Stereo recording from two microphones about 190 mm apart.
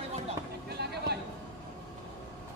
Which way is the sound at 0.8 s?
60° right (ahead or behind).